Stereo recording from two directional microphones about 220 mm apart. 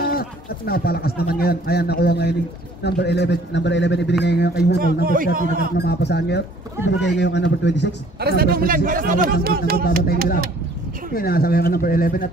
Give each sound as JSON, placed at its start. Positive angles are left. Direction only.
{"t": 0.0, "sound": "a man's voice", "side_deg": 45}
{"t": 5.0, "sound": "a man's voice", "side_deg": -40}
{"t": 5.8, "sound": "a man's voice", "side_deg": 50}
{"t": 8.2, "sound": "a man's voice", "side_deg": -45}
{"t": 9.8, "sound": "a man's voice", "side_deg": 45}